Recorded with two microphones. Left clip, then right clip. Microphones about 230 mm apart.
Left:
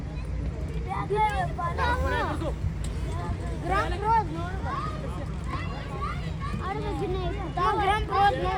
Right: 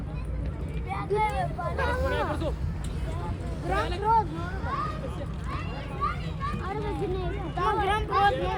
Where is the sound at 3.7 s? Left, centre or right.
Left.